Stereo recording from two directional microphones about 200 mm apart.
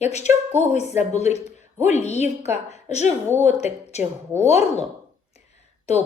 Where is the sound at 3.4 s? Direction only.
35° left (ahead or behind).